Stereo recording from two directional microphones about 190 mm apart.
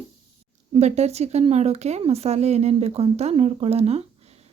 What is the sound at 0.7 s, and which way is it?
A woman's voice, 35° right (ahead or behind).